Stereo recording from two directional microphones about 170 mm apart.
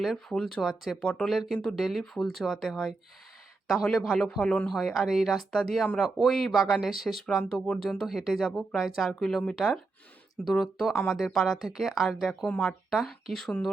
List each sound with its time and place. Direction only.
0.0 s speech: centre (ahead or behind)